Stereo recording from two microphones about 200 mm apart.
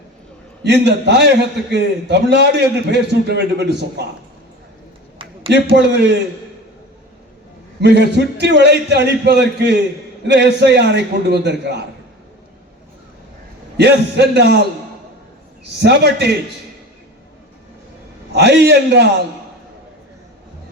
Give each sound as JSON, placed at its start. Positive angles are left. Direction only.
{"t": 0.6, "sound": "a man's voice", "side_deg": -60}
{"t": 5.1, "sound": "a sound", "side_deg": -25}
{"t": 5.7, "sound": "a man's voice", "side_deg": -60}
{"t": 7.8, "sound": "a man's voice", "side_deg": -60}
{"t": 13.7, "sound": "a man's voice", "side_deg": -55}
{"t": 15.8, "sound": "a man's voice", "side_deg": -55}
{"t": 18.3, "sound": "a man's voice", "side_deg": -55}